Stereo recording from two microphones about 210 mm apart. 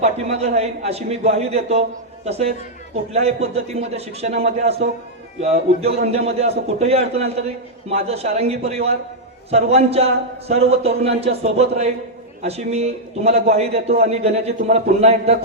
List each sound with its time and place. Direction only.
0.0 s a man's voice: 30° right (ahead or behind)